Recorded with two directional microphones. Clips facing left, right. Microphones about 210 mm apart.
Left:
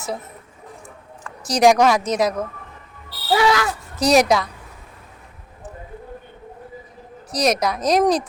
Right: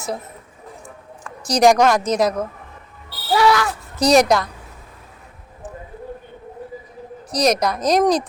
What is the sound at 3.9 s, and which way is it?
Speech, centre (ahead or behind).